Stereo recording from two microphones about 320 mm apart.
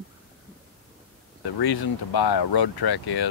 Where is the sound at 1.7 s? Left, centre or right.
Left.